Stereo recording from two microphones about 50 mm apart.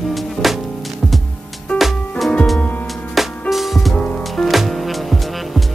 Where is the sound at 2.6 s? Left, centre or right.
Left.